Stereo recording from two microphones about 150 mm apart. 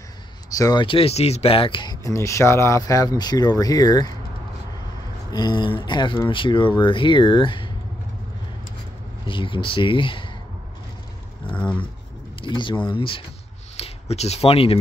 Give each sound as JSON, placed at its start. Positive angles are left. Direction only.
{"t": 0.5, "sound": "speech", "side_deg": 25}
{"t": 5.3, "sound": "speech", "side_deg": 30}
{"t": 9.2, "sound": "speech", "side_deg": 35}
{"t": 11.5, "sound": "speech", "side_deg": 10}
{"t": 12.4, "sound": "speech", "side_deg": 35}